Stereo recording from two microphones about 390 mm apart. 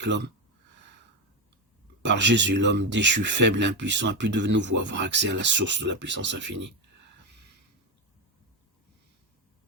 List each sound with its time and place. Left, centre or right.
0.0 s speech: right
2.0 s speech: right